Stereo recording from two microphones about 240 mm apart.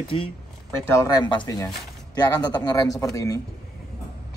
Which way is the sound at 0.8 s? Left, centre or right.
Centre.